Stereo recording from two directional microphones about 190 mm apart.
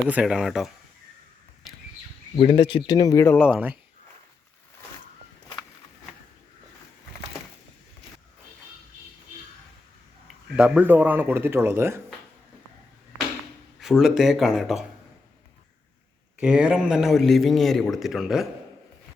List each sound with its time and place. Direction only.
0.1 s a man's voice: 5° right (ahead or behind)
2.3 s speech: 25° left (ahead or behind)
3.4 s speech: 5° right (ahead or behind)
10.2 s speech: 5° right (ahead or behind)
13.7 s a man's voice: centre (ahead or behind)
16.4 s a man's voice: 5° right (ahead or behind)